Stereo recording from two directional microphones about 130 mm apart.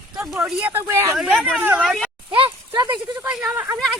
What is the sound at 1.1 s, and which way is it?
Speech, 5° right (ahead or behind).